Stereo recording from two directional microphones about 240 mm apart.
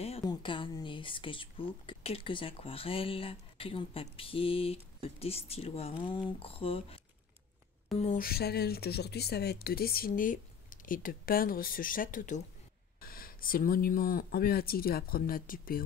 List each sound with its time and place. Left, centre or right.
0.0 s speech: left
8.0 s speech: left